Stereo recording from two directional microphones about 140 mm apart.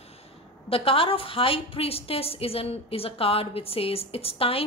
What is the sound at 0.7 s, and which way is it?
A woman's voice, 40° left (ahead or behind).